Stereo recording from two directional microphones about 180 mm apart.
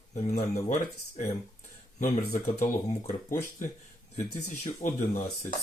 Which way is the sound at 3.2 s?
15° left (ahead or behind).